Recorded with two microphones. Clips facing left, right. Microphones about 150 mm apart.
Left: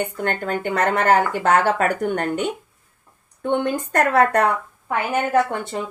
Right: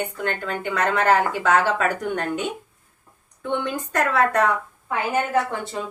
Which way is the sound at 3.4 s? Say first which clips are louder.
Left 5 dB; 50° left (ahead or behind).